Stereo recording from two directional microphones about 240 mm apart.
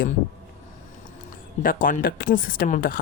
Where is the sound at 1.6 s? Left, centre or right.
Left.